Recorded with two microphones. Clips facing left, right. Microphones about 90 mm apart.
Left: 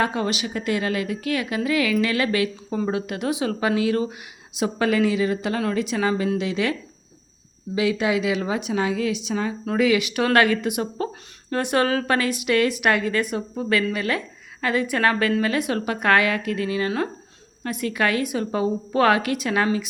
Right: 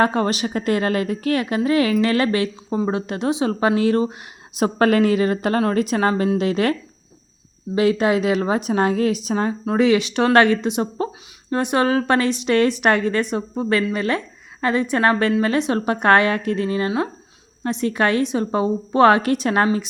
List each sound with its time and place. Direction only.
0.0 s a woman's voice: 40° right (ahead or behind)
4.5 s a woman's voice: 45° right (ahead or behind)
7.8 s a woman's voice: 45° right (ahead or behind)